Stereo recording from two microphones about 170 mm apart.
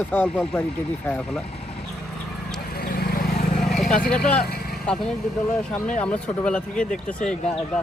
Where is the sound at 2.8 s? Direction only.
65° left (ahead or behind).